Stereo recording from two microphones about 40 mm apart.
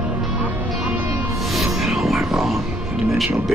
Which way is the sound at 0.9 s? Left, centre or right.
Right.